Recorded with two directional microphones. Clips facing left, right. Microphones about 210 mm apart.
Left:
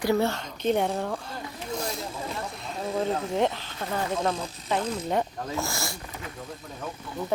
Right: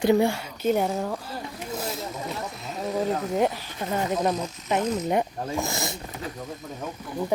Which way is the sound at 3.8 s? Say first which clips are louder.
Right 3 dB; 20° right (ahead or behind).